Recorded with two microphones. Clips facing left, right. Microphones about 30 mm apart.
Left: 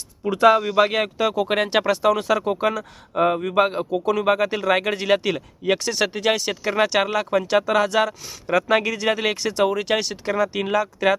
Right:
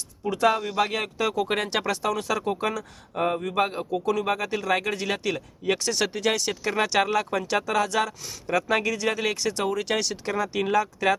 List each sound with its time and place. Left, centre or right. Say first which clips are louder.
0.3 s speech: left 7 dB; left; by 11.1 s centre